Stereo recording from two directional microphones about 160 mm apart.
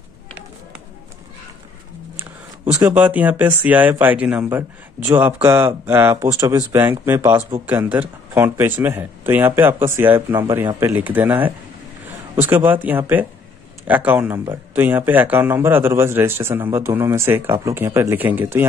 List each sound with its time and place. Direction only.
2.1 s a sound: 10° right (ahead or behind)
2.9 s speech: 10° right (ahead or behind)
7.2 s speech: 15° right (ahead or behind)